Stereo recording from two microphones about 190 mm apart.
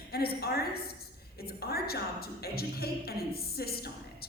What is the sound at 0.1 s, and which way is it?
A woman's voice, 55° left (ahead or behind).